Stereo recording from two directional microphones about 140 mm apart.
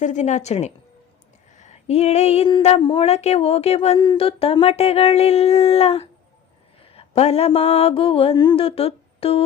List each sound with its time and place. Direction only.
0.0 s a woman's voice: 60° left (ahead or behind)
1.5 s a sound: 55° left (ahead or behind)
2.6 s mantra: 45° left (ahead or behind)
3.9 s mantra: 30° left (ahead or behind)